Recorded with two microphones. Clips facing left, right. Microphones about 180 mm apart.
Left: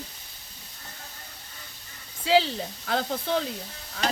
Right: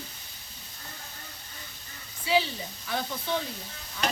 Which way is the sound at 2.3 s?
75° left (ahead or behind).